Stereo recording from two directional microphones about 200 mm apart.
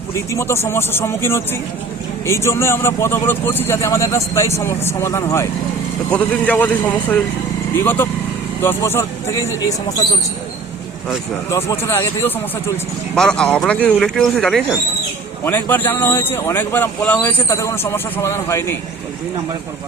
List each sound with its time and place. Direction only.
0.1 s speech: 15° left (ahead or behind)
8.6 s speech: 10° left (ahead or behind)
11.5 s speech: 15° left (ahead or behind)